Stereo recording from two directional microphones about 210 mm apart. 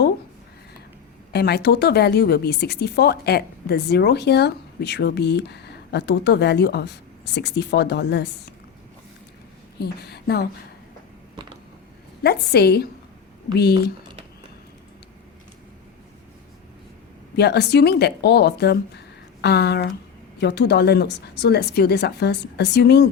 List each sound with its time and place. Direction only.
1.3 s speech: 50° left (ahead or behind)
9.7 s speech: 50° left (ahead or behind)
12.2 s speech: 50° left (ahead or behind)
17.3 s speech: 50° left (ahead or behind)